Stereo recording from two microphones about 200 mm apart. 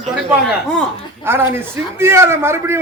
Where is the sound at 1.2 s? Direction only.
10° right (ahead or behind).